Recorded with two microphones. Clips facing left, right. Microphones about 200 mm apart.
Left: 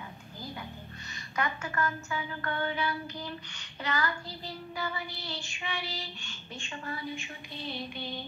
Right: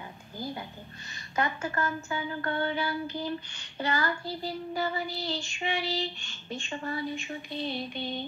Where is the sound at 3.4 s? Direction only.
30° right (ahead or behind).